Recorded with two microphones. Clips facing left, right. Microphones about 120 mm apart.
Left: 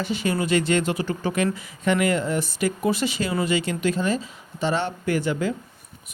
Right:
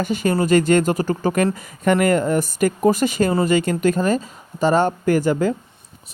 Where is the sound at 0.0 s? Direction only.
45° right (ahead or behind).